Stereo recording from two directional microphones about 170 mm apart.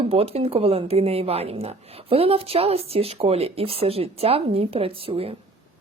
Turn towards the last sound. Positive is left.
turn(degrees=-35)  # may be behind; listen again after turning